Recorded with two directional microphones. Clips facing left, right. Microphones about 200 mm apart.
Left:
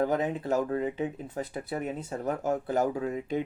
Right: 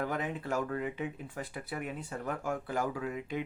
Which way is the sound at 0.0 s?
35° left (ahead or behind).